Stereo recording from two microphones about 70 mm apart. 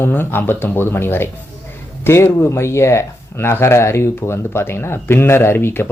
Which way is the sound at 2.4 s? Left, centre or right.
Left.